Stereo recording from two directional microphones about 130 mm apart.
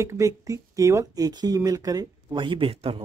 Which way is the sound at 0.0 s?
25° right (ahead or behind).